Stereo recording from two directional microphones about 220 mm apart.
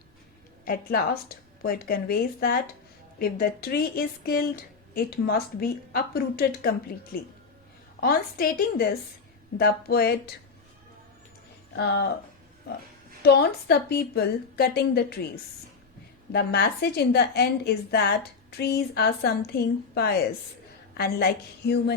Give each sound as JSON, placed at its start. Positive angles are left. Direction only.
{"t": 0.6, "sound": "a woman's voice", "side_deg": 40}
{"t": 8.0, "sound": "speech", "side_deg": 40}
{"t": 11.7, "sound": "speech", "side_deg": 50}
{"t": 13.2, "sound": "speech", "side_deg": 50}
{"t": 16.3, "sound": "speech", "side_deg": 45}